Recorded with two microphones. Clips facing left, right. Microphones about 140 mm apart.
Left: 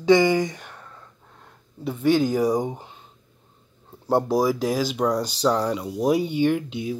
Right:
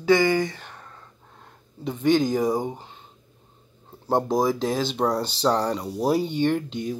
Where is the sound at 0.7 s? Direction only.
10° right (ahead or behind).